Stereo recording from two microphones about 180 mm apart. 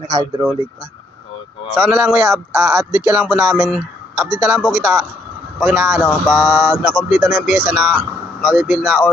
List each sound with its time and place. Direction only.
0.1 s speech: 25° right (ahead or behind)
1.7 s speech: 5° right (ahead or behind)